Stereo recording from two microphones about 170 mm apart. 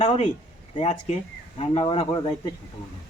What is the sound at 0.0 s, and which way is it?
Speech, 35° left (ahead or behind).